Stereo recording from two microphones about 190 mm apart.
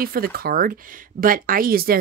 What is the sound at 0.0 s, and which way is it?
Speech, 50° right (ahead or behind).